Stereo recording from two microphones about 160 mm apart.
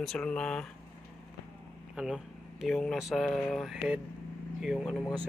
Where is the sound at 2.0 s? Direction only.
5° right (ahead or behind).